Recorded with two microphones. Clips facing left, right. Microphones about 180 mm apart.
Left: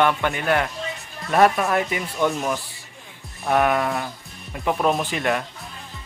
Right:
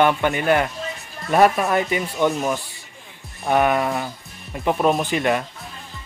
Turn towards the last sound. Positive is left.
turn(degrees=0)  # may be behind; listen again after turning